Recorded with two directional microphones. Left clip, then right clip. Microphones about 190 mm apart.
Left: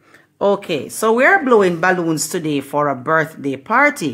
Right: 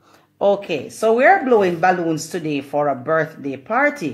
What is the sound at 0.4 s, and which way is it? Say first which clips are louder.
Speech: left 1 dB; 50° left (ahead or behind).